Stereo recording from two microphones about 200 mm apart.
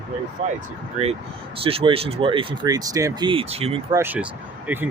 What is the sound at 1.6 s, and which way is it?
Speech, 30° right (ahead or behind).